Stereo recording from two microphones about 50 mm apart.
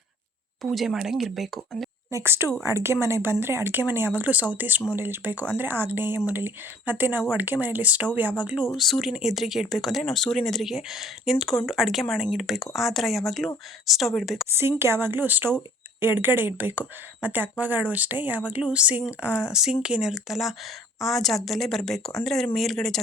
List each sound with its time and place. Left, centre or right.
0.6 s speech: centre
2.2 s speech: right
4.2 s speech: right
8.7 s speech: centre
14.5 s speech: right; by 23.0 s centre